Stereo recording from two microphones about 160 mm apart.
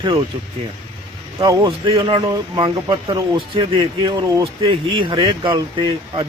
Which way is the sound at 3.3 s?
30° right (ahead or behind).